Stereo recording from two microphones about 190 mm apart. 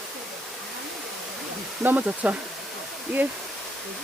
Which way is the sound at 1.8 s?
10° right (ahead or behind).